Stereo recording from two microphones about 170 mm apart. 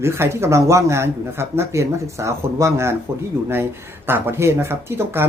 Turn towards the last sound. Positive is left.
turn(degrees=-15)  # may be behind; listen again after turning